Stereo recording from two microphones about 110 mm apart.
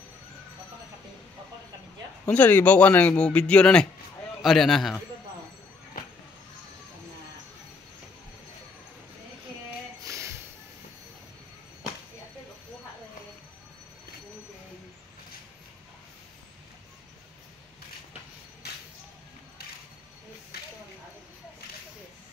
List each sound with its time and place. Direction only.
2.2 s a man's voice: 15° left (ahead or behind)
10.0 s music: 25° right (ahead or behind)